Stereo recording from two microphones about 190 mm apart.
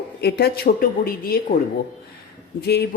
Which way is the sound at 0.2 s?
60° left (ahead or behind).